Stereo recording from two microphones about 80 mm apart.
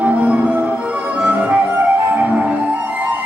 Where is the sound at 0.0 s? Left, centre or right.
Centre.